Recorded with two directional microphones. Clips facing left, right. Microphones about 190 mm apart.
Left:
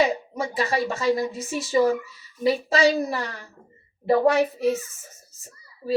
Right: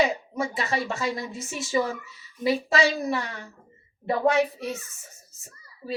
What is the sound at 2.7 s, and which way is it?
Speech, 40° left (ahead or behind).